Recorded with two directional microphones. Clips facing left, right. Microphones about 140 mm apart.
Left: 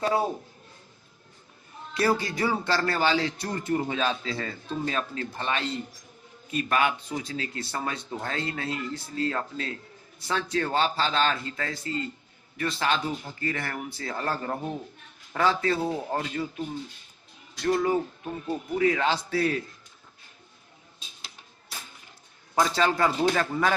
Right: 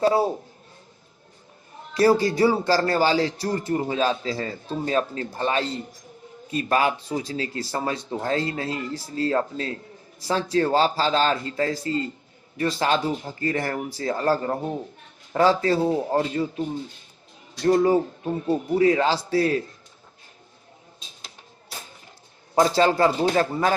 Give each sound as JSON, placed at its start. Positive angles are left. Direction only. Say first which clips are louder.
{"t": 0.0, "sound": "a man's voice", "louder": "right 5 dB", "side_deg": -30}
{"t": 1.9, "sound": "a man's voice", "louder": "right 7 dB", "side_deg": -35}
{"t": 21.2, "sound": "music", "louder": "right 3 dB", "side_deg": -35}
{"t": 22.5, "sound": "a man's voice", "louder": "right 5 dB", "side_deg": -35}